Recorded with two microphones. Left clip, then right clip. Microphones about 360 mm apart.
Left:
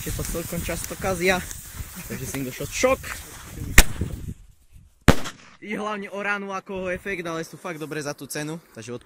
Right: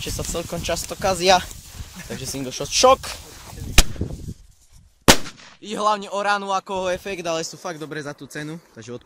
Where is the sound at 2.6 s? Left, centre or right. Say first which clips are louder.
Right 7 dB; centre.